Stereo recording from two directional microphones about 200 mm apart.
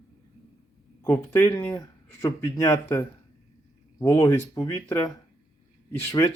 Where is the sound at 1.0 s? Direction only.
10° left (ahead or behind).